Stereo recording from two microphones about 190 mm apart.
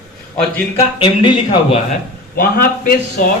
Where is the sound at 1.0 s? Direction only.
25° left (ahead or behind).